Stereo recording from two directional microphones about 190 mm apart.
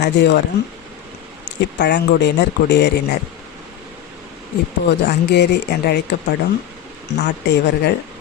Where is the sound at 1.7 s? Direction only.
60° left (ahead or behind).